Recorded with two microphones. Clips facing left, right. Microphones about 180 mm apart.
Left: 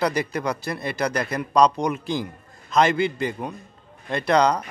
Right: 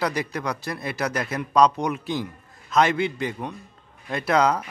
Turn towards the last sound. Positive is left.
turn(degrees=-5)  # may be behind; listen again after turning